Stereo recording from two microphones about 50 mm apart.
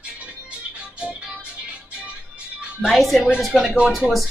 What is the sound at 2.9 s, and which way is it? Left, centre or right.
Speech, centre.